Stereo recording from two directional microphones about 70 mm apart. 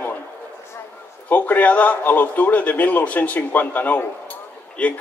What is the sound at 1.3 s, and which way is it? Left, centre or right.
A man's voice, left.